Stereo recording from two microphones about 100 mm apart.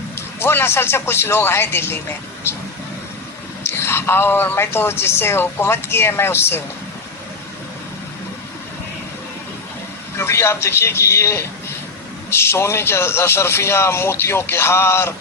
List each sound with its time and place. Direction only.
0.2 s a woman's voice: 25° left (ahead or behind)
3.6 s a woman's voice: 25° left (ahead or behind)
10.2 s a woman's voice: 25° left (ahead or behind)